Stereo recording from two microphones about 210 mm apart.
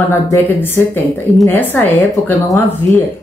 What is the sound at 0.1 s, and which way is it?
Speech, 10° left (ahead or behind).